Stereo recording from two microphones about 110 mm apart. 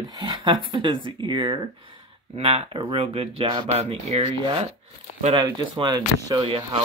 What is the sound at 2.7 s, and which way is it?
Speech, 55° right (ahead or behind).